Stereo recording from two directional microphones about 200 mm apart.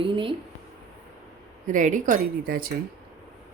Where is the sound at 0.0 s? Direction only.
25° right (ahead or behind).